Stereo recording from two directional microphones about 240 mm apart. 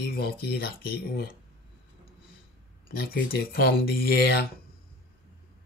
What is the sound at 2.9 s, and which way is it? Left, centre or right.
Speech, left.